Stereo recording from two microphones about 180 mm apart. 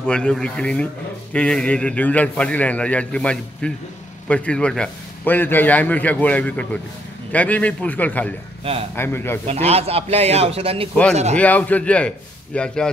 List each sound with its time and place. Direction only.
0.0 s a man's voice: 5° left (ahead or behind)
9.5 s a man's voice: 35° right (ahead or behind)
11.3 s a man's voice: 10° left (ahead or behind)